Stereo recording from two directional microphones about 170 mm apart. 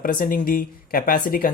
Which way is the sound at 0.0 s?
55° left (ahead or behind).